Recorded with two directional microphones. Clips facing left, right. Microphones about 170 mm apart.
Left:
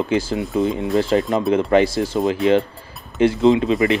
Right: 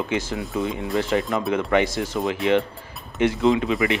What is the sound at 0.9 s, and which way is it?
Speech, 35° left (ahead or behind).